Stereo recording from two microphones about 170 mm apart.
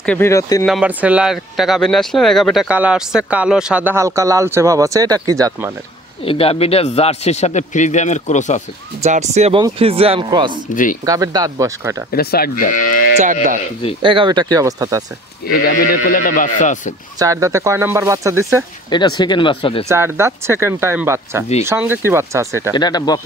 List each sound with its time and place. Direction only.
0.0 s speech: 10° left (ahead or behind)
0.7 s speech: 5° right (ahead or behind)
6.2 s a man's voice: 35° left (ahead or behind)
9.0 s speech: 40° right (ahead or behind)
10.7 s speech: 50° left (ahead or behind)
11.1 s speech: 20° right (ahead or behind)
12.1 s speech: 65° left (ahead or behind)
13.2 s speech: 50° right (ahead or behind)
14.0 s speech: 30° right (ahead or behind)
15.4 s speech: 60° left (ahead or behind)
17.2 s speech: 20° right (ahead or behind)
18.9 s speech: 25° left (ahead or behind)
19.9 s speech: 15° right (ahead or behind)
22.8 s speech: 25° left (ahead or behind)